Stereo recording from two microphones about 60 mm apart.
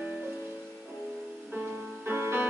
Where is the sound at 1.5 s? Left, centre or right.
Right.